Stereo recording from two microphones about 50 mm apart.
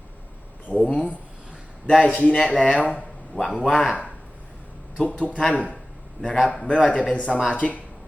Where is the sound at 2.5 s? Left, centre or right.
Centre.